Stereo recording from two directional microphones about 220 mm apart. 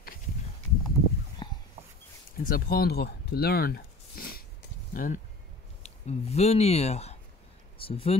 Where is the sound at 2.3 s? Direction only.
40° left (ahead or behind).